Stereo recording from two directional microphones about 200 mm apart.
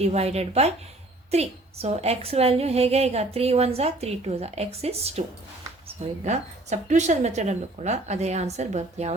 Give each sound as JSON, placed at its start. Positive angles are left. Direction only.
{"t": 0.0, "sound": "a woman's voice", "side_deg": -30}
{"t": 6.2, "sound": "a woman's voice", "side_deg": -35}